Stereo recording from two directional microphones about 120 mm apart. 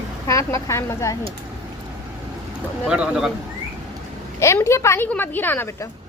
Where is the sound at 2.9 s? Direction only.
10° right (ahead or behind).